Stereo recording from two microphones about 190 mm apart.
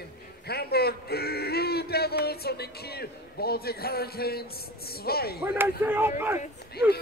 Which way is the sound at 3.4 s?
55° left (ahead or behind).